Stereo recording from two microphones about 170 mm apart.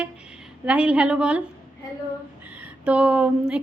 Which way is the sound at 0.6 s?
5° right (ahead or behind).